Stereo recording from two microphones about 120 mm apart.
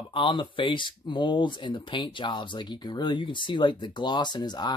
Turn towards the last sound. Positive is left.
turn(degrees=35)  # may be behind; listen again after turning